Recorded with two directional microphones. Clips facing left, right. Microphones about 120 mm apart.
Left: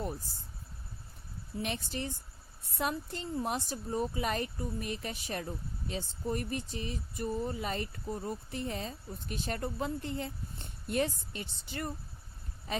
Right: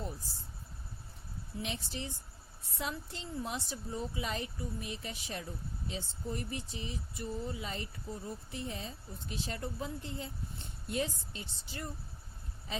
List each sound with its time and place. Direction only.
1.6 s a woman's voice: 55° left (ahead or behind)